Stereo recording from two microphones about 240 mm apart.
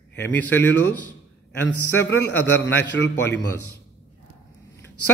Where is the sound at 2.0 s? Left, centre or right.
Centre.